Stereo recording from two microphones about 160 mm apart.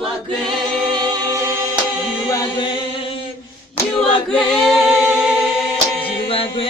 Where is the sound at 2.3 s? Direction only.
25° left (ahead or behind).